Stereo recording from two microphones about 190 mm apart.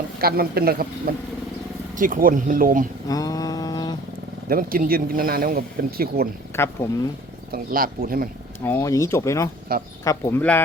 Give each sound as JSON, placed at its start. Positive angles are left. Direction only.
{"t": 0.2, "sound": "speech", "side_deg": -55}
{"t": 3.1, "sound": "mantra", "side_deg": 20}
{"t": 4.4, "sound": "speech", "side_deg": -50}
{"t": 6.5, "sound": "speech", "side_deg": 15}
{"t": 7.5, "sound": "speech", "side_deg": -50}
{"t": 8.6, "sound": "speech", "side_deg": 15}